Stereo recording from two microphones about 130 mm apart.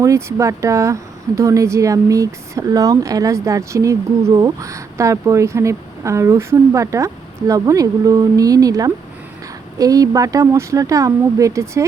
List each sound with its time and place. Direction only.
0.0 s speech: 25° right (ahead or behind)